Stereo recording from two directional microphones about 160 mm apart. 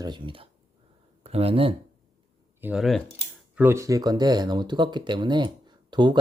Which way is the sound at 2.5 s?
10° right (ahead or behind).